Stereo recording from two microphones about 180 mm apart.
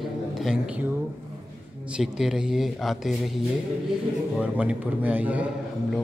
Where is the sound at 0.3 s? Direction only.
Centre (ahead or behind).